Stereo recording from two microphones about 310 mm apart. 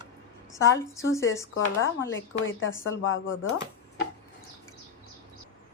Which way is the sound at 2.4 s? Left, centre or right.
Left.